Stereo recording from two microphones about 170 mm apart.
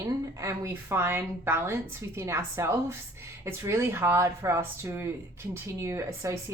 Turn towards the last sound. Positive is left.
turn(degrees=-15)  # may be behind; listen again after turning